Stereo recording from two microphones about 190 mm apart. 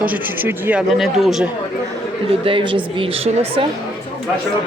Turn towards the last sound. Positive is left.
turn(degrees=-30)  # may be behind; listen again after turning